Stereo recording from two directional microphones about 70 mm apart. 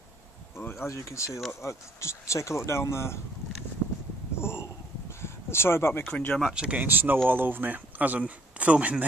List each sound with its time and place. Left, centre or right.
0.6 s speech: left
4.4 s a sound: left
6.0 s speech: centre
6.4 s speech: centre